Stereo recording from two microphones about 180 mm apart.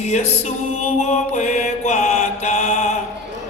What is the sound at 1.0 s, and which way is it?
Mantra, 40° left (ahead or behind).